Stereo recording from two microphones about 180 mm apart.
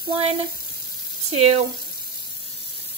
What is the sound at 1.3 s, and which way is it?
Speech, 35° right (ahead or behind).